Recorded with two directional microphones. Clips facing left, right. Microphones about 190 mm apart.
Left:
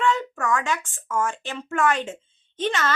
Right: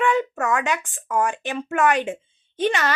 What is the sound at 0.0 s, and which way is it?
A child's voice, 20° right (ahead or behind).